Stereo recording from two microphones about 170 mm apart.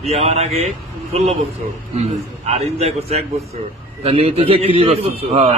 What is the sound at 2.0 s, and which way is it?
A man's voice, 40° right (ahead or behind).